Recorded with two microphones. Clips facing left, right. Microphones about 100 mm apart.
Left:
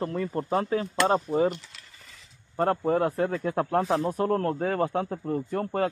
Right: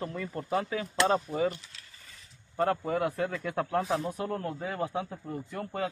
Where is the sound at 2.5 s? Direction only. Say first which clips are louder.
Left 4 dB; 35° left (ahead or behind).